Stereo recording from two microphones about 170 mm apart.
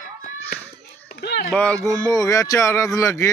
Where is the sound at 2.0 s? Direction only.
20° left (ahead or behind).